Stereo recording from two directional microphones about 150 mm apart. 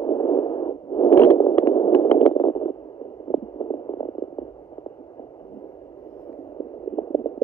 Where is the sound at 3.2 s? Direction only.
15° left (ahead or behind).